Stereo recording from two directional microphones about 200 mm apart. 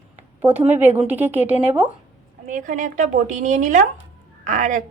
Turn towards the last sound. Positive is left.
turn(degrees=-40)  # may be behind; listen again after turning